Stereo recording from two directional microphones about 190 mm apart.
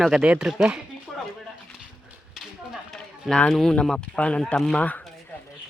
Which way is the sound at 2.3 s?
Centre (ahead or behind).